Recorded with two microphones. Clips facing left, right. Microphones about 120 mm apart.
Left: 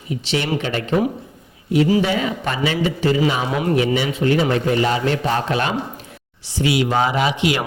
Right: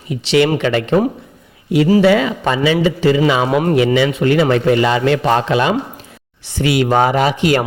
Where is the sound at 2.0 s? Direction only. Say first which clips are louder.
Right 7 dB; 90° right.